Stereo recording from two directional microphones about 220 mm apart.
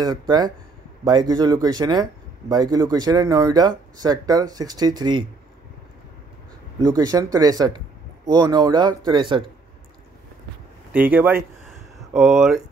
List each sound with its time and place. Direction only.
0.0 s speech: 20° right (ahead or behind)
6.8 s speech: 20° right (ahead or behind)
10.9 s speech: 10° right (ahead or behind)